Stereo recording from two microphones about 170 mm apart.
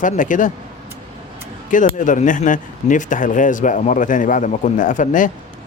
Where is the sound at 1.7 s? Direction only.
50° left (ahead or behind).